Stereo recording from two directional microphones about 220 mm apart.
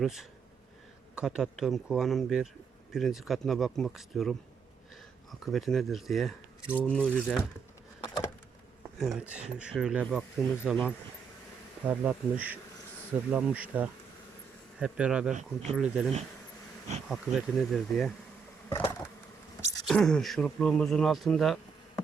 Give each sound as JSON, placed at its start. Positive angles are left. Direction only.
{"t": 0.0, "sound": "speech", "side_deg": 0}
{"t": 8.0, "sound": "vehicle", "side_deg": 15}
{"t": 9.0, "sound": "speech", "side_deg": -5}
{"t": 15.3, "sound": "speech", "side_deg": -35}
{"t": 15.7, "sound": "speech", "side_deg": -5}
{"t": 17.1, "sound": "speech", "side_deg": 0}
{"t": 18.7, "sound": "bee", "side_deg": 15}
{"t": 19.9, "sound": "speech", "side_deg": 5}